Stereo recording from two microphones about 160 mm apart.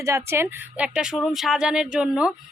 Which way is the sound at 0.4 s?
5° right (ahead or behind).